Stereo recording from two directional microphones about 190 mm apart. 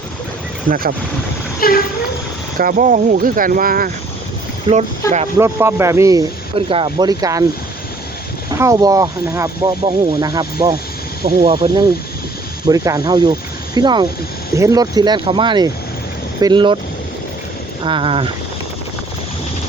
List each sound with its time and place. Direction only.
0.7 s speech: 50° right (ahead or behind)
1.6 s speech: 50° left (ahead or behind)
2.6 s speech: 45° right (ahead or behind)
5.0 s speech: 15° left (ahead or behind)
5.4 s speech: 15° right (ahead or behind)
6.7 s speech: 25° right (ahead or behind)
8.4 s speech: 15° right (ahead or behind)
17.8 s speech: 25° right (ahead or behind)